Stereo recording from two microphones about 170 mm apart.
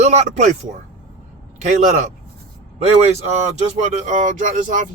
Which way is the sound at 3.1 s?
40° right (ahead or behind).